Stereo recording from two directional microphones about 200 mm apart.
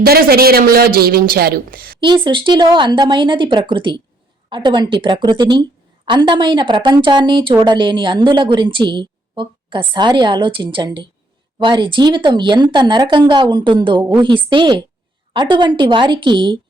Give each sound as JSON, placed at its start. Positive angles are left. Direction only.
{"t": 0.0, "sound": "a woman's voice", "side_deg": -50}
{"t": 2.0, "sound": "speech", "side_deg": -25}